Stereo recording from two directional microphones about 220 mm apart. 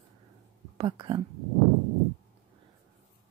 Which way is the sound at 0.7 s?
25° right (ahead or behind).